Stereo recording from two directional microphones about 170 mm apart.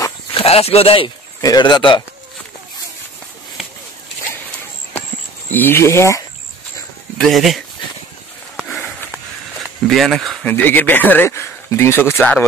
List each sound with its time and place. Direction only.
0.3 s speech: 35° left (ahead or behind)
5.5 s speech: 10° left (ahead or behind)
7.2 s speech: centre (ahead or behind)
8.5 s a sound: centre (ahead or behind)
10.5 s speech: 10° left (ahead or behind)